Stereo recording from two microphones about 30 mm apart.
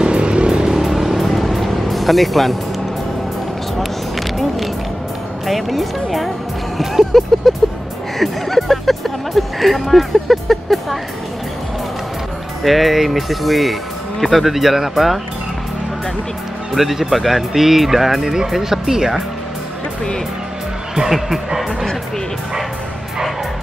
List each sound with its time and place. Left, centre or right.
0.0 s vehicle: right; by 1.2 s centre
1.2 s music: centre
3.7 s vehicle: centre
5.5 s speech: centre
12.6 s speech: centre
16.7 s speech: centre